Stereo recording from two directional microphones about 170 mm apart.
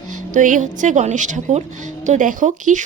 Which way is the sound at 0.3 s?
50° right (ahead or behind).